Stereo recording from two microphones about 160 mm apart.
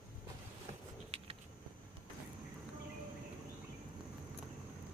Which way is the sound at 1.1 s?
40° right (ahead or behind).